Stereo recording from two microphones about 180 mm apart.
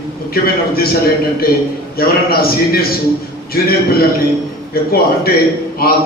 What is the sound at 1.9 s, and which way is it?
A man's voice, 55° left (ahead or behind).